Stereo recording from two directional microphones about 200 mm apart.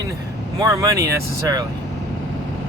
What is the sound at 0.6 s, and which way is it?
Speech, 15° right (ahead or behind).